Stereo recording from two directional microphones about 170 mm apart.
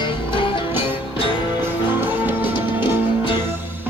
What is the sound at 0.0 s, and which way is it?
Music, 30° left (ahead or behind).